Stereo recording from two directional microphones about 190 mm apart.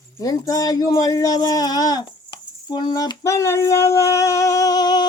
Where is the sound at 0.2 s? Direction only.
20° left (ahead or behind).